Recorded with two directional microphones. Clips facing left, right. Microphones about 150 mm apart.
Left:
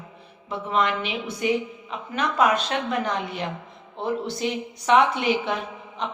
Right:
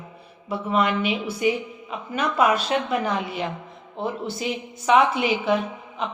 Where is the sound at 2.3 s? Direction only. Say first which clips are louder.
Right 1 dB; 5° right (ahead or behind).